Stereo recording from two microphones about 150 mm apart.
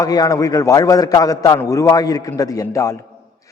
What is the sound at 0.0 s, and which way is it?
A man's voice, 25° left (ahead or behind).